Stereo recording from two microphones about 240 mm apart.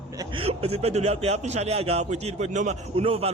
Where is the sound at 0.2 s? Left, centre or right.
Right.